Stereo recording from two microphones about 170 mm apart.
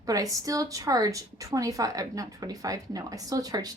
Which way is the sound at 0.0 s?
20° right (ahead or behind).